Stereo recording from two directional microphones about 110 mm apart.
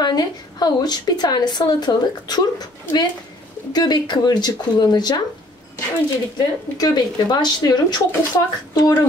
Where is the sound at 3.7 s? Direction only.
40° left (ahead or behind).